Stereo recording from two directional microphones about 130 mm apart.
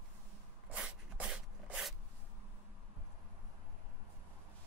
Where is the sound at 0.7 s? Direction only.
5° right (ahead or behind).